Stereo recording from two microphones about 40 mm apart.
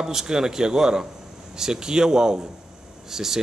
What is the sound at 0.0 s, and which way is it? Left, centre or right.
A man's voice, centre.